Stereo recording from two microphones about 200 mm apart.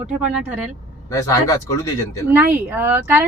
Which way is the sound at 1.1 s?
15° left (ahead or behind).